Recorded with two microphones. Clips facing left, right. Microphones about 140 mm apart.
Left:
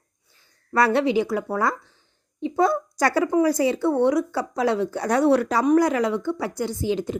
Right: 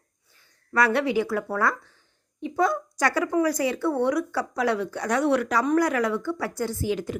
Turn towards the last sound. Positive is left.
turn(degrees=25)  # may be behind; listen again after turning